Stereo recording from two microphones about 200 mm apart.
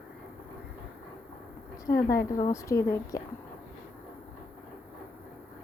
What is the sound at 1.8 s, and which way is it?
A woman's voice, 15° left (ahead or behind).